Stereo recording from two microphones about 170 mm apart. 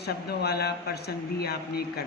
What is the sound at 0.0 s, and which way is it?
Speech, 70° left (ahead or behind).